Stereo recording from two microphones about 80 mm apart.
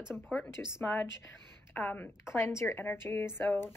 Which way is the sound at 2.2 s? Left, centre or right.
Left.